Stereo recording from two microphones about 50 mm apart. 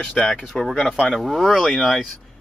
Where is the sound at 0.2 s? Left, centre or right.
Centre.